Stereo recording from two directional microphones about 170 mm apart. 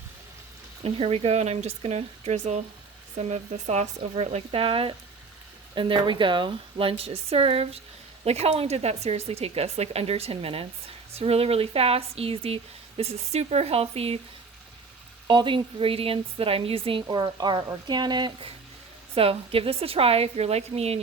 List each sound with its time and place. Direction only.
0.8 s speech: 35° right (ahead or behind)
15.3 s a woman's voice: 30° right (ahead or behind)